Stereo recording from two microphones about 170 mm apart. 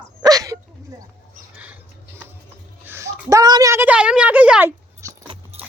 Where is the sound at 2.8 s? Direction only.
15° right (ahead or behind).